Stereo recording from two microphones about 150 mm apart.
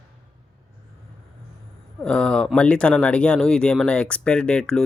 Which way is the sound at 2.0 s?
5° left (ahead or behind).